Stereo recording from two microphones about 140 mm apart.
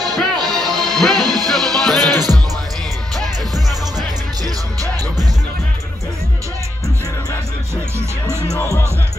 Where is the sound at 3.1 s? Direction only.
Centre (ahead or behind).